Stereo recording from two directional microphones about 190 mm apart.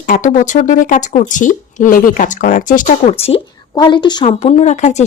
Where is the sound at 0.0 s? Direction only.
45° left (ahead or behind).